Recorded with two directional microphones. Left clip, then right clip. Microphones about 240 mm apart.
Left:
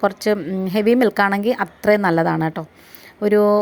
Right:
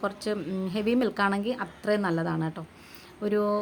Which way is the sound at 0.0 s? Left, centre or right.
Left.